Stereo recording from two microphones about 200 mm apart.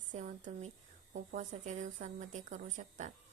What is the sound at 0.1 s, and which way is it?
A woman's voice, 40° right (ahead or behind).